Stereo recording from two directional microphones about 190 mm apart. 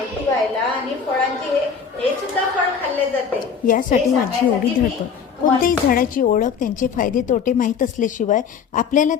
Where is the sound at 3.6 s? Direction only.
45° left (ahead or behind).